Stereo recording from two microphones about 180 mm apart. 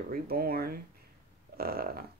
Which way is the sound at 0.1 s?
55° right (ahead or behind).